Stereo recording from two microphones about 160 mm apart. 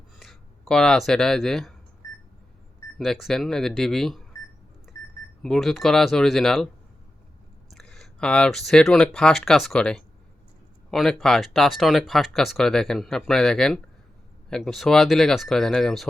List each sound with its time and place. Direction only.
0.2 s speech: centre (ahead or behind)
3.0 s speech: centre (ahead or behind)
5.4 s speech: centre (ahead or behind)
7.7 s speech: 5° left (ahead or behind)